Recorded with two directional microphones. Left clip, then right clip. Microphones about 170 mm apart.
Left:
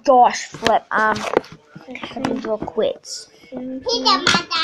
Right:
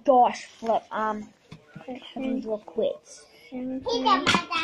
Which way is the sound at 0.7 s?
60° left (ahead or behind).